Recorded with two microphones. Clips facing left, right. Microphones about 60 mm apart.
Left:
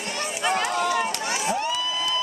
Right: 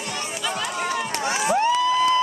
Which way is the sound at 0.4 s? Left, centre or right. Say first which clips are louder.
Left 6 dB; left.